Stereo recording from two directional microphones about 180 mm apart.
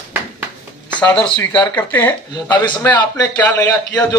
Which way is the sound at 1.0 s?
5° left (ahead or behind).